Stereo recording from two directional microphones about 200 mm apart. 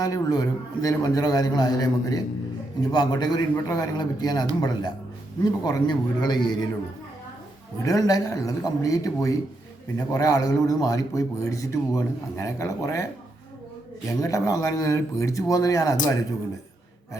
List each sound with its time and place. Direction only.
0.0 s a man's voice: 20° left (ahead or behind)
7.8 s a man's voice: 15° left (ahead or behind)
14.2 s a man's voice: 15° left (ahead or behind)